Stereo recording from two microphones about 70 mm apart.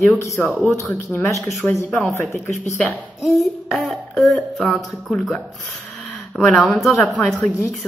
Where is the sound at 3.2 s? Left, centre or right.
Centre.